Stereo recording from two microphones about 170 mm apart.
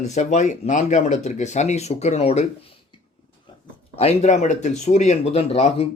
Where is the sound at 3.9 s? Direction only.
40° left (ahead or behind).